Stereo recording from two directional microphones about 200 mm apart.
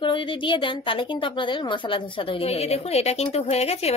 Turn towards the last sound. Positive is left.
turn(degrees=30)  # may be behind; listen again after turning